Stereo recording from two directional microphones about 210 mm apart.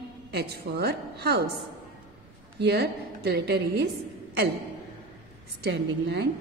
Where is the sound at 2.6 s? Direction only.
50° right (ahead or behind).